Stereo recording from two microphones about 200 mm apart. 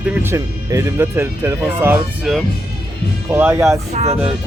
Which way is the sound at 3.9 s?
30° right (ahead or behind).